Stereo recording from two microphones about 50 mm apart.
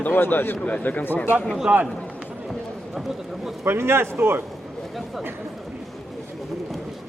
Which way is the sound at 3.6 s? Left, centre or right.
Right.